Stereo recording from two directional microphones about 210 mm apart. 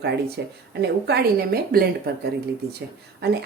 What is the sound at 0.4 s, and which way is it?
Speech, 55° right (ahead or behind).